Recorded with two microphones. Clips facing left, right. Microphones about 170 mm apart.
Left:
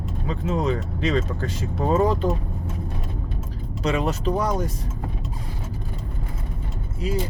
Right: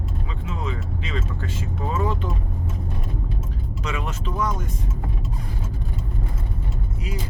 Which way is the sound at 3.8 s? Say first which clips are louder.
Left 8 dB; 35° left (ahead or behind).